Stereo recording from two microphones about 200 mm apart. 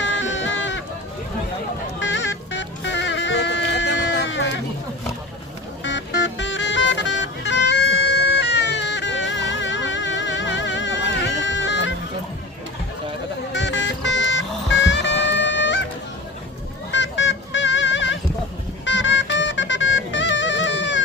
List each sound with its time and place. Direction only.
0.0 s goat: 70° left (ahead or behind)
2.0 s music: 70° left (ahead or behind)
5.8 s music: 65° left (ahead or behind)
13.5 s music: 65° left (ahead or behind)
16.9 s fowl: 65° left (ahead or behind)
18.9 s music: 65° left (ahead or behind)